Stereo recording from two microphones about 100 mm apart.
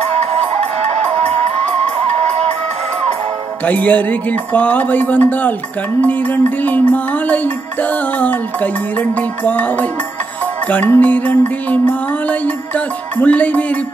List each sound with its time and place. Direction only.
3.6 s music: 15° left (ahead or behind)